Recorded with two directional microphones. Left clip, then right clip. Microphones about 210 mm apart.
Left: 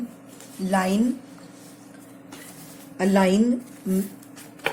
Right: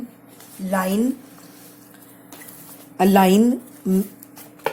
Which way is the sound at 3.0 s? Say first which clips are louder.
Right 5 dB; 45° right (ahead or behind).